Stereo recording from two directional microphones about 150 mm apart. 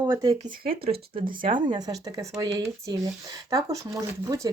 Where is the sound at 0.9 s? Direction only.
35° right (ahead or behind).